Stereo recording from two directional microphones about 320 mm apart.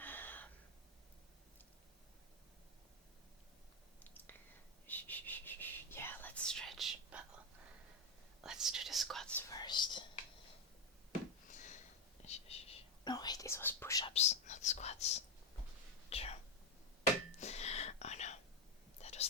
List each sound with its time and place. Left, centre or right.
0.0 s gasp: centre
4.9 s whispering: centre
8.4 s whispering: centre
11.5 s a sound: left
12.2 s whispering: centre
17.4 s whispering: centre